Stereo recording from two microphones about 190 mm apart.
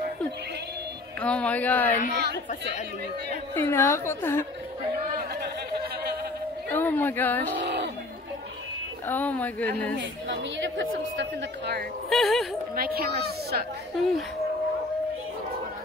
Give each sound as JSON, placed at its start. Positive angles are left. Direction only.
{"t": 1.2, "sound": "a woman's voice", "side_deg": 5}
{"t": 2.1, "sound": "a woman's voice", "side_deg": -60}
{"t": 3.5, "sound": "a woman's voice", "side_deg": 10}
{"t": 6.7, "sound": "a woman's voice", "side_deg": 10}
{"t": 7.6, "sound": "chatter", "side_deg": -65}
{"t": 9.0, "sound": "a woman's voice", "side_deg": 10}
{"t": 9.9, "sound": "a woman's voice", "side_deg": -65}
{"t": 12.1, "sound": "speech", "side_deg": 0}
{"t": 12.7, "sound": "speech", "side_deg": -50}